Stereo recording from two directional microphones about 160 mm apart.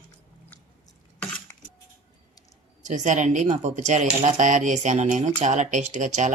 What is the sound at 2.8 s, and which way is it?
Speech, 50° right (ahead or behind).